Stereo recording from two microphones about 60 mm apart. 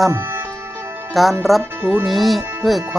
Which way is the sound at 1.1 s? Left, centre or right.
Centre.